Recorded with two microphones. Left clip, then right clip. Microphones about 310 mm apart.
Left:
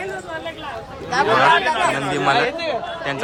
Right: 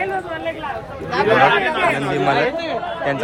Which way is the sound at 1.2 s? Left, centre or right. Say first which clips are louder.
Right 1 dB; left.